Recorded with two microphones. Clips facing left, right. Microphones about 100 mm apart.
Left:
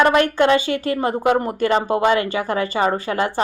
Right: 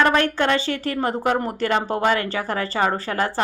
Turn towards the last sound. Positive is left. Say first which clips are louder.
# left 2 dB
turn(degrees=20)  # may be behind; listen again after turning